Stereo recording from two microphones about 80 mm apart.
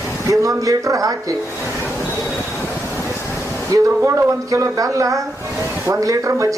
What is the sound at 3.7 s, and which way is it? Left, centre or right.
Speech, right.